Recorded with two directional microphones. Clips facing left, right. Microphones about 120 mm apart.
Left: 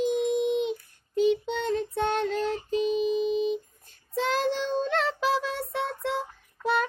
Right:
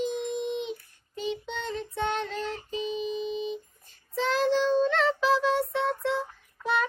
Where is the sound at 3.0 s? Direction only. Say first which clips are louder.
Left 6 dB; 50° left (ahead or behind).